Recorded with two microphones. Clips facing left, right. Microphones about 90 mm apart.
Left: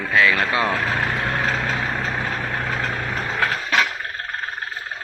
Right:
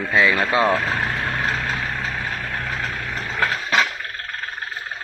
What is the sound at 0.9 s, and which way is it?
Vehicle, 20° left (ahead or behind).